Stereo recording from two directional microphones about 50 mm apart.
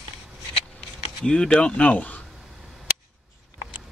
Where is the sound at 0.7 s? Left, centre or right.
Centre.